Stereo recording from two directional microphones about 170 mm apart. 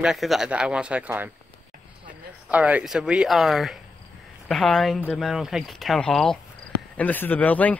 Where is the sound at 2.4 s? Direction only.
10° right (ahead or behind).